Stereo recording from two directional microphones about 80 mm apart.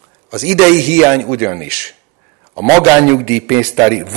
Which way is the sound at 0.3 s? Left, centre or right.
Centre.